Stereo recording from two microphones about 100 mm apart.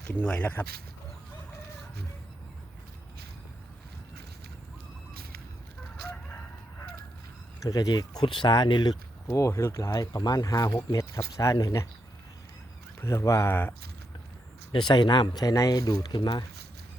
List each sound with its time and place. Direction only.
0.1 s speech: 15° left (ahead or behind)
7.6 s speech: 40° left (ahead or behind)
9.3 s speech: 30° left (ahead or behind)
13.0 s speech: 30° left (ahead or behind)
14.7 s speech: 55° left (ahead or behind)